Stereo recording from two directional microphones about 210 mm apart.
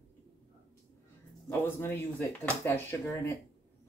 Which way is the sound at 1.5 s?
10° left (ahead or behind).